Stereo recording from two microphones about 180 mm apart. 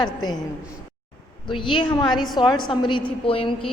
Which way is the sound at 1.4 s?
25° left (ahead or behind).